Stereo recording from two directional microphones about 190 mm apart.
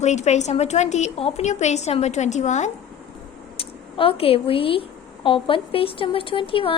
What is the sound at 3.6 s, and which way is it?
A woman's voice, 30° left (ahead or behind).